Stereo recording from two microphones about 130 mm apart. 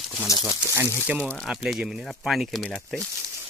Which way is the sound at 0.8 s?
15° left (ahead or behind).